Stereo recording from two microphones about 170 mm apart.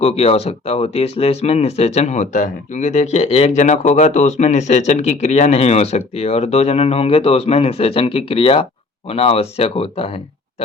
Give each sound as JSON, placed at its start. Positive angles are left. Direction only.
{"t": 0.0, "sound": "speech", "side_deg": 35}